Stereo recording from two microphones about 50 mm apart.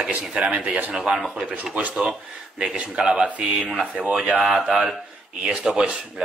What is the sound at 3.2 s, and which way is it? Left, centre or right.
A man's voice, right.